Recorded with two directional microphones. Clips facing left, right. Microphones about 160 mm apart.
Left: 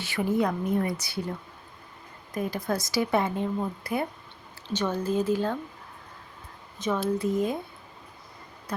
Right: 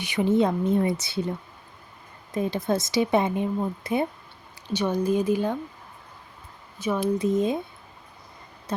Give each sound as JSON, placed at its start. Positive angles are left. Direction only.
{"t": 0.0, "sound": "speech", "side_deg": -20}
{"t": 2.3, "sound": "speech", "side_deg": -25}
{"t": 6.7, "sound": "speech", "side_deg": -10}